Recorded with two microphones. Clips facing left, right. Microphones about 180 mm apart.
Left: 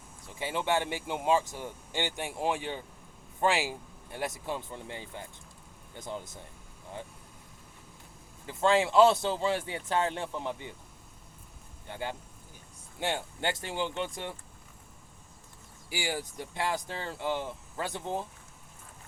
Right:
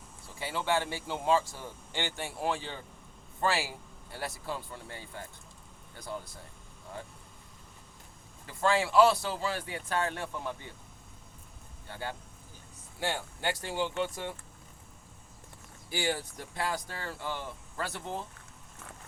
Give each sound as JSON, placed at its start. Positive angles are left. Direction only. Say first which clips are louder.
{"t": 0.3, "sound": "speech", "louder": "left 1 dB", "side_deg": 20}
{"t": 8.4, "sound": "speech", "louder": "left 3 dB", "side_deg": 20}
{"t": 11.9, "sound": "speech", "louder": "left 2 dB", "side_deg": 20}
{"t": 15.9, "sound": "speech", "louder": "right 2 dB", "side_deg": 10}